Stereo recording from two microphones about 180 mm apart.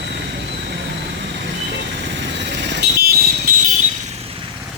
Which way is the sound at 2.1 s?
75° right (ahead or behind).